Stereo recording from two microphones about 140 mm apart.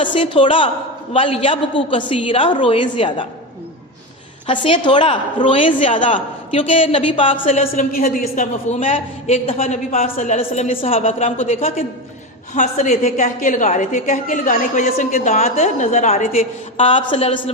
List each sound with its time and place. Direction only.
0.0 s a woman's voice: 35° left (ahead or behind)
4.4 s a woman's voice: 40° left (ahead or behind)
7.8 s a woman's voice: 80° left
8.7 s a man's voice: 50° left (ahead or behind)
12.5 s a woman's voice: 60° left (ahead or behind)
16.7 s a woman's voice: 40° left (ahead or behind)